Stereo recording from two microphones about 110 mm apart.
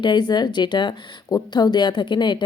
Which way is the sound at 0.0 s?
45° left (ahead or behind).